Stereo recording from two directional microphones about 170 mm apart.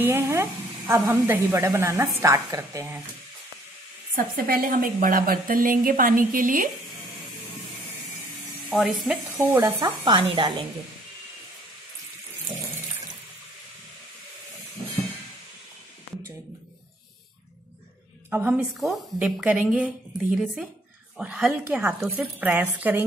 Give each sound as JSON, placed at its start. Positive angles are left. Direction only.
{"t": 0.0, "sound": "speech", "side_deg": -15}
{"t": 4.1, "sound": "a woman's voice", "side_deg": -55}
{"t": 8.7, "sound": "speech", "side_deg": 0}
{"t": 9.4, "sound": "speech", "side_deg": -15}
{"t": 18.3, "sound": "speech", "side_deg": -10}
{"t": 21.2, "sound": "speech", "side_deg": -10}